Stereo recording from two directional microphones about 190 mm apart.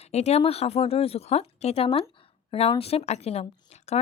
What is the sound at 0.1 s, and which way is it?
Speech, 35° left (ahead or behind).